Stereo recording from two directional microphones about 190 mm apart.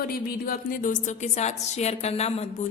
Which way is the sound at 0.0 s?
50° left (ahead or behind).